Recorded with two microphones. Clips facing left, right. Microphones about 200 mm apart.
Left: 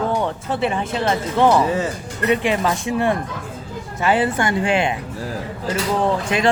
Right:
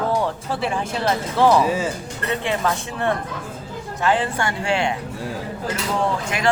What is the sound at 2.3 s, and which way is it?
Speech, 15° left (ahead or behind).